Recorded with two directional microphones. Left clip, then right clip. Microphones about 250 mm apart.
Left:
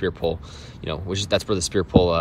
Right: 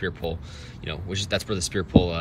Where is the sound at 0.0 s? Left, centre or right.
Centre.